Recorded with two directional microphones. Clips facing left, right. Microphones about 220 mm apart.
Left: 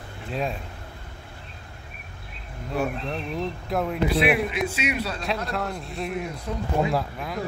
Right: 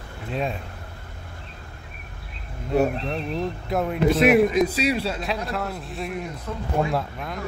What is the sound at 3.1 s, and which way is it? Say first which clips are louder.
Speech: right 2 dB; centre (ahead or behind).